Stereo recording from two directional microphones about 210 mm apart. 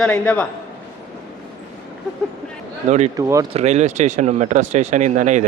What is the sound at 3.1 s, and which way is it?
Speech, 15° right (ahead or behind).